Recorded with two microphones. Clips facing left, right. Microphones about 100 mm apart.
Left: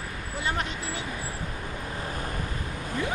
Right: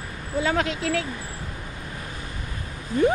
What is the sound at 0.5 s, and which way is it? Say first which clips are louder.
Speech: right 8 dB; 90° right.